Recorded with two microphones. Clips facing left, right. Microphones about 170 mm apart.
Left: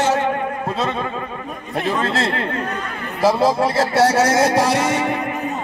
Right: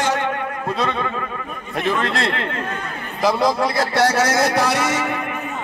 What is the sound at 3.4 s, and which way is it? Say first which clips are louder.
Speech: left 2 dB; 30° left (ahead or behind).